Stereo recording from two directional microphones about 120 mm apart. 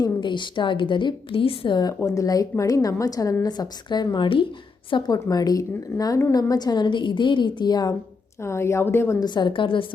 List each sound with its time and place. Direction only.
0.0 s a woman's voice: 40° left (ahead or behind)
8.4 s a woman's voice: 20° left (ahead or behind)
9.2 s a woman's voice: 40° left (ahead or behind)